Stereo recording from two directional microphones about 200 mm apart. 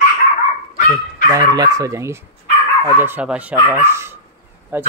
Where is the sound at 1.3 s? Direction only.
20° right (ahead or behind).